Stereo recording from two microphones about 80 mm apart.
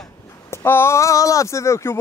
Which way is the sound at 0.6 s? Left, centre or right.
Left.